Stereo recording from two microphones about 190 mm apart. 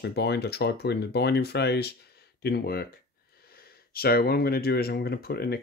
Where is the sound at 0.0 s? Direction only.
60° left (ahead or behind).